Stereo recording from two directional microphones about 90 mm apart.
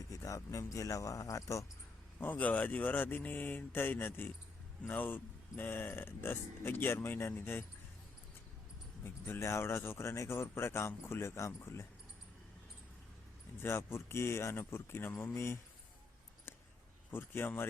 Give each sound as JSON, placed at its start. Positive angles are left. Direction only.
{"t": 0.1, "sound": "speech", "side_deg": 40}
{"t": 2.1, "sound": "speech", "side_deg": 20}
{"t": 9.0, "sound": "speech", "side_deg": 25}
{"t": 13.6, "sound": "speech", "side_deg": 30}
{"t": 17.1, "sound": "speech", "side_deg": 25}